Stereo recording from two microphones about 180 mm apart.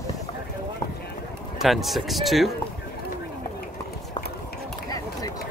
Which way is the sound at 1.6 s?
Centre (ahead or behind).